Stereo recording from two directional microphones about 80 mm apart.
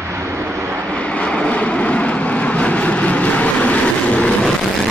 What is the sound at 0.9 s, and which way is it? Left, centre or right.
Vehicle, centre.